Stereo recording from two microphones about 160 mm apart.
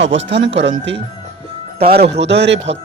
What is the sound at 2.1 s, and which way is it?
Speech, 90° right.